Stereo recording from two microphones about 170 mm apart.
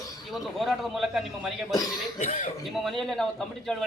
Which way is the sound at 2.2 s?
40° left (ahead or behind).